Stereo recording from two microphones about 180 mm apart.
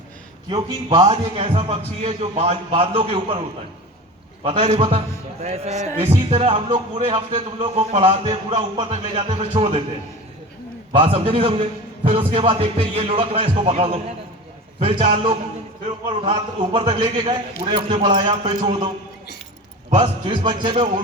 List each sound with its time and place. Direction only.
0.5 s a man's voice: 25° right (ahead or behind)
4.4 s a man's voice: 30° right (ahead or behind)
10.9 s a man's voice: 30° right (ahead or behind)
20.0 s a man's voice: 25° right (ahead or behind)